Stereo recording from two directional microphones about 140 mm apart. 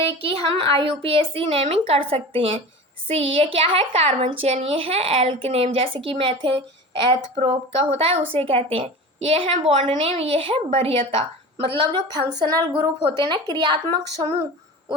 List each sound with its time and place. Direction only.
0.0 s speech: 40° right (ahead or behind)